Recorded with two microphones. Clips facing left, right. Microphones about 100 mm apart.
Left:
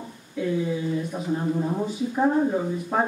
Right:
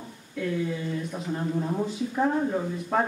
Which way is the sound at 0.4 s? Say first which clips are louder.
Left 3 dB; 10° left (ahead or behind).